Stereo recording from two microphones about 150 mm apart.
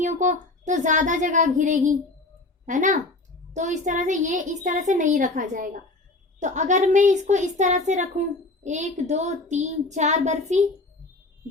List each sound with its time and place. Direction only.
0.0 s a woman's voice: 55° right (ahead or behind)